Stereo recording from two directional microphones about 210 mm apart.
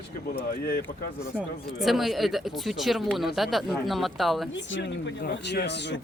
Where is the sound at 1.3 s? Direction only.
Centre (ahead or behind).